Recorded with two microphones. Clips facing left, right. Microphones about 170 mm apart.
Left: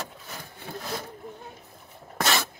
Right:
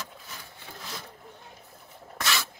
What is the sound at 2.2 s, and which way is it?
Spray, 55° left (ahead or behind).